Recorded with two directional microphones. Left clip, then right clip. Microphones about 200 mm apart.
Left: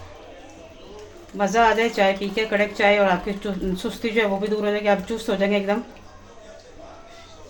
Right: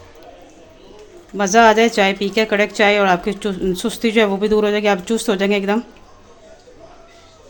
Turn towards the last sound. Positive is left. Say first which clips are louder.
# right 4 dB
turn(degrees=-60)  # may be behind; listen again after turning